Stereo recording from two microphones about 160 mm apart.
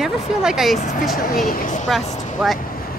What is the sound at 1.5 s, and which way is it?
Speech, 55° left (ahead or behind).